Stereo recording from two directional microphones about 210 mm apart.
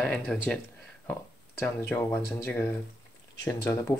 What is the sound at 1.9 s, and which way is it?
Speech, 10° left (ahead or behind).